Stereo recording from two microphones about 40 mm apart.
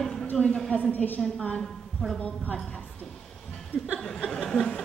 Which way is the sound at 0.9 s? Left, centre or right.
Left.